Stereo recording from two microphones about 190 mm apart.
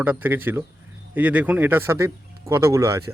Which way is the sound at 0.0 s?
10° right (ahead or behind).